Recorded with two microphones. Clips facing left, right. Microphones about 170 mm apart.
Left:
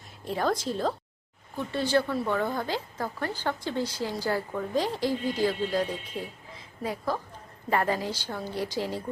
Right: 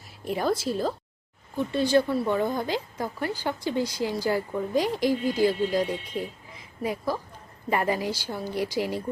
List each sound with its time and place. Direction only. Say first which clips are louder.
0.3 s speech: right 2 dB; 10° right (ahead or behind)